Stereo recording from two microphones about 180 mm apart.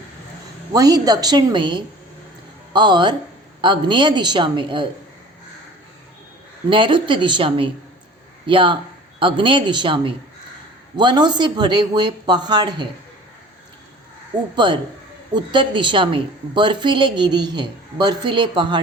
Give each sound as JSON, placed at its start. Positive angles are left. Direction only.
{"t": 0.7, "sound": "a woman's voice", "side_deg": -20}
{"t": 6.7, "sound": "a woman's voice", "side_deg": -25}
{"t": 14.5, "sound": "a woman's voice", "side_deg": -25}